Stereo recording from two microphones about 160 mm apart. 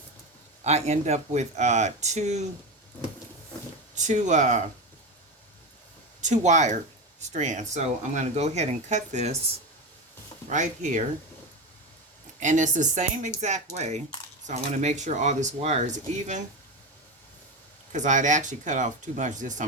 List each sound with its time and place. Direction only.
0.6 s speech: 45° right (ahead or behind)
3.9 s speech: 50° right (ahead or behind)
6.2 s speech: 50° right (ahead or behind)
10.5 s speech: 50° right (ahead or behind)
12.4 s speech: 50° right (ahead or behind)
17.9 s speech: 50° right (ahead or behind)